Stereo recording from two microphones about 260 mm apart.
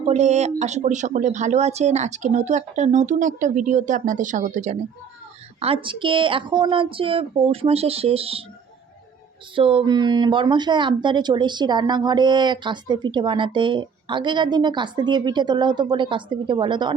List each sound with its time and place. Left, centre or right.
0.0 s speech: right
9.6 s speech: centre